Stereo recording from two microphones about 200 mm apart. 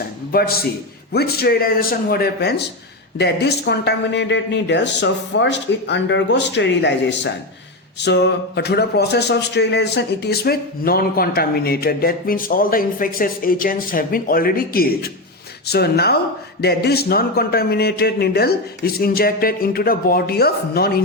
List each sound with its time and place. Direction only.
0.3 s a man's voice: 50° left (ahead or behind)